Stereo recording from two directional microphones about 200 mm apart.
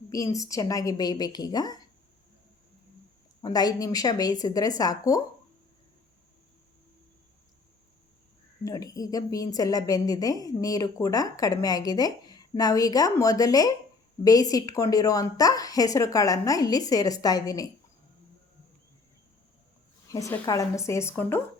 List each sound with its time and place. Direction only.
0.1 s a woman's voice: 15° left (ahead or behind)
3.4 s a woman's voice: 20° left (ahead or behind)
8.6 s a woman's voice: 20° left (ahead or behind)
20.1 s a woman's voice: 15° left (ahead or behind)